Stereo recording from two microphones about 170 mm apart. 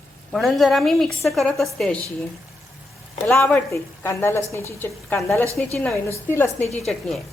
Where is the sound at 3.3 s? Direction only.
15° left (ahead or behind).